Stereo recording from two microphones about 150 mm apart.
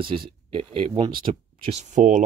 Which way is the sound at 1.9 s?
55° right (ahead or behind).